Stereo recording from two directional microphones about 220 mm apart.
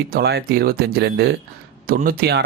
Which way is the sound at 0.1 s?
45° right (ahead or behind).